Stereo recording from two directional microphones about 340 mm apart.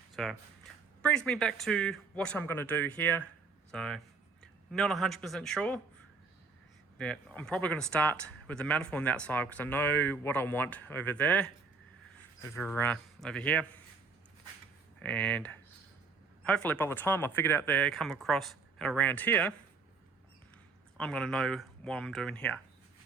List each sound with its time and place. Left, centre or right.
0.1 s a sound: centre
1.0 s speech: centre
7.0 s speech: centre
12.6 s speech: centre
14.9 s speech: centre
21.0 s speech: centre